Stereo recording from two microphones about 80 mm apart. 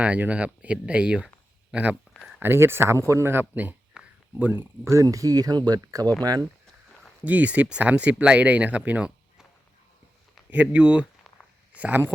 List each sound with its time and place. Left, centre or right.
0.0 s speech: centre
2.4 s speech: right
3.5 s speech: right
4.0 s a sound: centre
4.4 s speech: right
7.3 s speech: centre
10.5 s speech: centre